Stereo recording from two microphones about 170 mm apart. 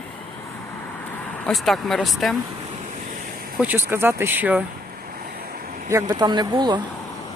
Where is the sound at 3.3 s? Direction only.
60° right (ahead or behind).